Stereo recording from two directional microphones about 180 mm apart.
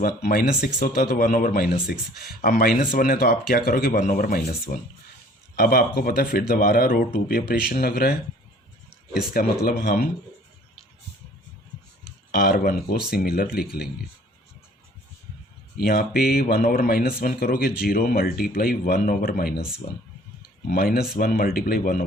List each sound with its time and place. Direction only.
0.0 s a man's voice: 55° left (ahead or behind)
9.3 s speech: 55° left (ahead or behind)
12.3 s speech: 55° left (ahead or behind)
15.8 s speech: 55° left (ahead or behind)
20.7 s speech: 55° left (ahead or behind)